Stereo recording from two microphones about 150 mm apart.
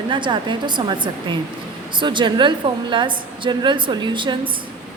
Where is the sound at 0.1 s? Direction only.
30° right (ahead or behind).